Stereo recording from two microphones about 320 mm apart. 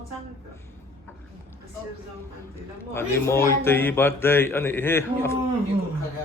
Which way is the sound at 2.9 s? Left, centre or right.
Centre.